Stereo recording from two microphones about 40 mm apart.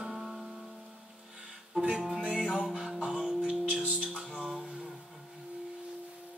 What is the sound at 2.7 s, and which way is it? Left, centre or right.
Music, centre.